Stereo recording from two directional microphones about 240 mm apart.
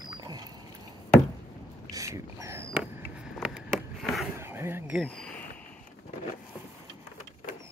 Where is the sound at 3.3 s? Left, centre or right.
Centre.